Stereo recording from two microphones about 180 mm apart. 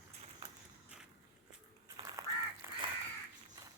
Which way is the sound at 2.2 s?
20° right (ahead or behind).